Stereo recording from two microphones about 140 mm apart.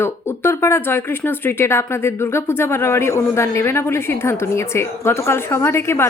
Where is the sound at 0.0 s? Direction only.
20° left (ahead or behind).